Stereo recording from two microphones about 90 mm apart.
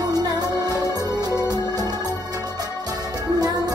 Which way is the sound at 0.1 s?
45° right (ahead or behind).